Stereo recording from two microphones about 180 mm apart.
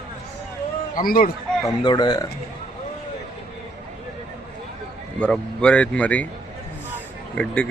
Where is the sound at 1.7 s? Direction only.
25° left (ahead or behind).